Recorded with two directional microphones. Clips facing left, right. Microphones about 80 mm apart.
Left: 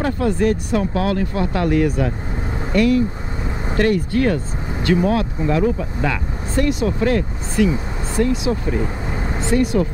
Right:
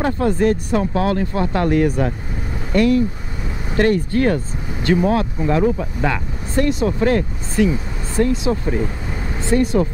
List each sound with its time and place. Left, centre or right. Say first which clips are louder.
0.0 s speech: right 1 dB; right
9.2 s vehicle: left 3 dB; left
9.5 s speech: right 1 dB; right